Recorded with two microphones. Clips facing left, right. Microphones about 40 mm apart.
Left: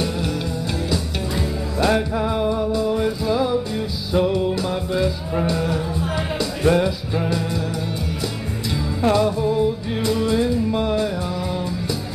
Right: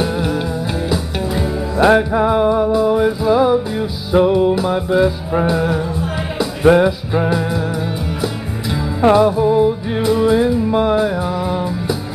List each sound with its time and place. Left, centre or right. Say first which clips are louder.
0.8 s music: right 5 dB; right
9.0 s music: right 7 dB; right